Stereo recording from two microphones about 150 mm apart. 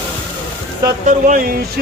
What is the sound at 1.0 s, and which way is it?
Speech, 70° right (ahead or behind).